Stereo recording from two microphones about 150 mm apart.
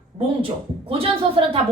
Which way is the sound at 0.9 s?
40° right (ahead or behind).